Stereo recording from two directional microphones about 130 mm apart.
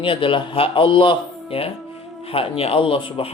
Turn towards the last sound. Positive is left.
turn(degrees=40)  # may be behind; listen again after turning